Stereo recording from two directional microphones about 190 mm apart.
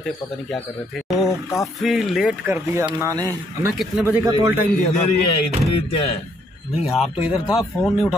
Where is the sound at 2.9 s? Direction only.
15° right (ahead or behind).